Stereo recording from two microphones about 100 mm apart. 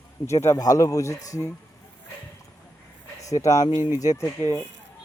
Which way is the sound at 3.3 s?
35° left (ahead or behind).